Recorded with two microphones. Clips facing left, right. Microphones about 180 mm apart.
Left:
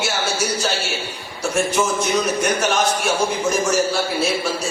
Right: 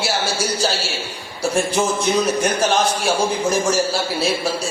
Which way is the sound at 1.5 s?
30° right (ahead or behind).